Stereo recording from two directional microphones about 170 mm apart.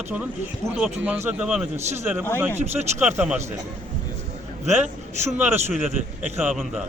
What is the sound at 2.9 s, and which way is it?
Speech, 10° right (ahead or behind).